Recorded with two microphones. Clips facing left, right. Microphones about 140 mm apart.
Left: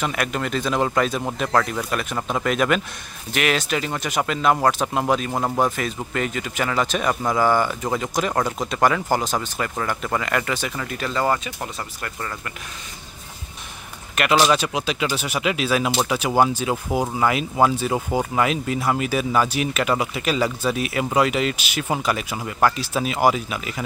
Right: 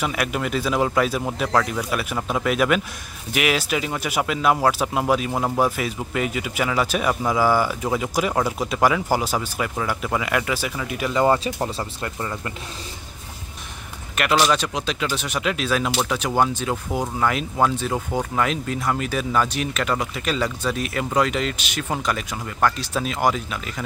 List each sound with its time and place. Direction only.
0.0 s speech: 5° right (ahead or behind)
11.2 s speech: 30° right (ahead or behind)
14.3 s speech: 5° left (ahead or behind)